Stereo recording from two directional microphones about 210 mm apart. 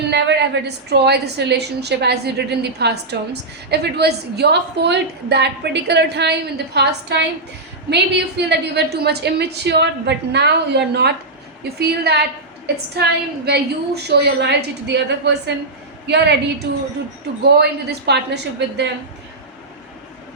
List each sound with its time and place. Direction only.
0.1 s a woman's voice: 55° right (ahead or behind)
17.4 s a woman's voice: 50° right (ahead or behind)